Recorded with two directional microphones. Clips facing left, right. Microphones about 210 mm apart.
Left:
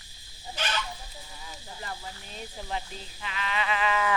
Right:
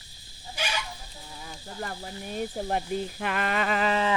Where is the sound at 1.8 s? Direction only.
55° right (ahead or behind); by 4.1 s 35° right (ahead or behind).